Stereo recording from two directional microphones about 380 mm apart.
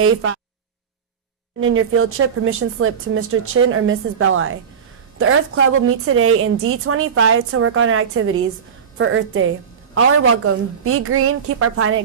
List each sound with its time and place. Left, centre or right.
0.0 s a woman's voice: right
1.6 s a woman's voice: right